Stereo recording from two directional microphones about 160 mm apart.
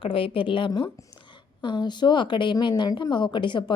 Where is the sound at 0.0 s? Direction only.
35° left (ahead or behind).